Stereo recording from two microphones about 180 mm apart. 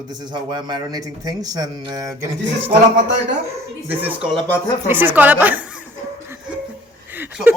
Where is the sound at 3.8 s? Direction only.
10° right (ahead or behind).